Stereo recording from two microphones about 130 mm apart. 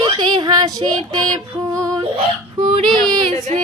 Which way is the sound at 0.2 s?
35° right (ahead or behind).